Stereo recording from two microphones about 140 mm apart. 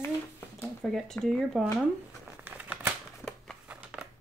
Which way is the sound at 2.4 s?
10° right (ahead or behind).